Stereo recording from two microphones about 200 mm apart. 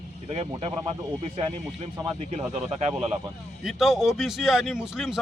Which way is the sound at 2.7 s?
30° right (ahead or behind).